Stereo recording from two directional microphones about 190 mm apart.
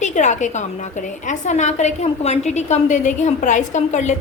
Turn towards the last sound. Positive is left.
turn(degrees=40)  # may be behind; listen again after turning